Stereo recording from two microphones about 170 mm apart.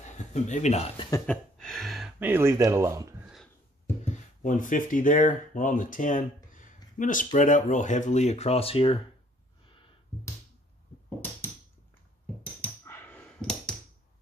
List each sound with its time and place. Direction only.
0.3 s a man's voice: 45° left (ahead or behind)
1.2 s speech: 5° left (ahead or behind); by 3.3 s 15° right (ahead or behind)
4.0 s speech: 45° left (ahead or behind)
12.6 s a sound: 10° left (ahead or behind)